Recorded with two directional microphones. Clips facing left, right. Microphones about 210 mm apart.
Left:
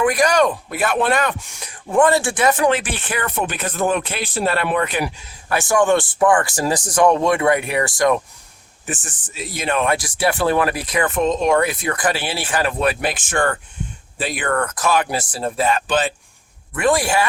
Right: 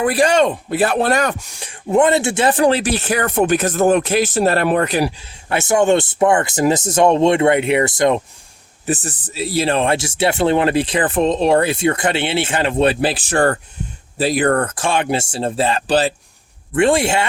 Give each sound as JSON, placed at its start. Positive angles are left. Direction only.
{"t": 0.0, "sound": "speech", "side_deg": -30}
{"t": 1.5, "sound": "speech", "side_deg": -25}
{"t": 8.9, "sound": "speech", "side_deg": -35}
{"t": 16.7, "sound": "speech", "side_deg": -25}